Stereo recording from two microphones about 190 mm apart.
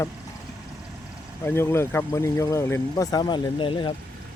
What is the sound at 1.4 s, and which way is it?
Speech, 10° left (ahead or behind).